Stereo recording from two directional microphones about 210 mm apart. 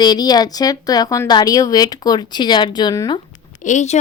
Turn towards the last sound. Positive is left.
turn(degrees=35)  # may be behind; listen again after turning